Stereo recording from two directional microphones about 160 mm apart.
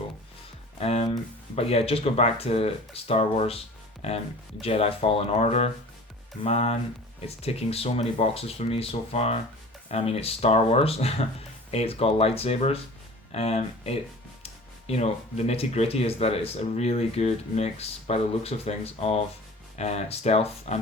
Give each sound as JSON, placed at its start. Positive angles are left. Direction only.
{"t": 0.8, "sound": "speech", "side_deg": 40}